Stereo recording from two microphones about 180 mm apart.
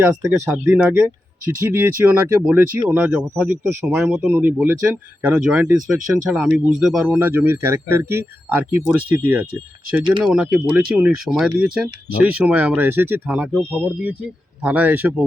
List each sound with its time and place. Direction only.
0.0 s speech: 10° right (ahead or behind)
10.0 s speech: 30° right (ahead or behind)
10.2 s speech: 5° right (ahead or behind)